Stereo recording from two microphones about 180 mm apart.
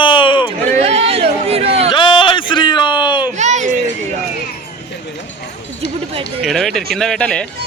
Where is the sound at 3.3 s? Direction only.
40° right (ahead or behind).